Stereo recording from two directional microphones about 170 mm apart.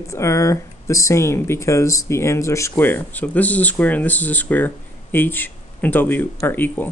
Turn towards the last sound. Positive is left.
turn(degrees=10)  # may be behind; listen again after turning